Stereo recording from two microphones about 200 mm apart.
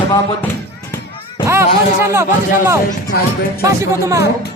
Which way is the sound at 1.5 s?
10° right (ahead or behind).